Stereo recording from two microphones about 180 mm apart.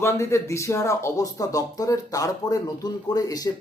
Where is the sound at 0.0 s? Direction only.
15° left (ahead or behind).